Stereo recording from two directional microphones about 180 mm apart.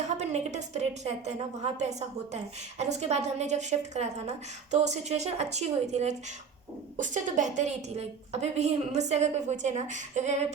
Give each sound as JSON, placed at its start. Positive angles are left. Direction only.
{"t": 0.2, "sound": "a woman's voice", "side_deg": -40}